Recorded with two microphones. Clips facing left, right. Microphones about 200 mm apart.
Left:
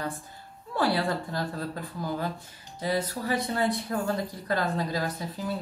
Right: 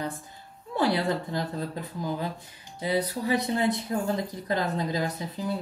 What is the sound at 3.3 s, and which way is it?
Speech, 20° right (ahead or behind).